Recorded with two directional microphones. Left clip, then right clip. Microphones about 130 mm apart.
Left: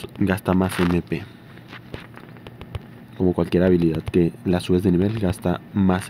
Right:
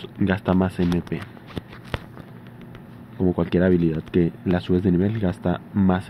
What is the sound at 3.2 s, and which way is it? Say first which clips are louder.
Speech: left 2 dB; 25° left (ahead or behind).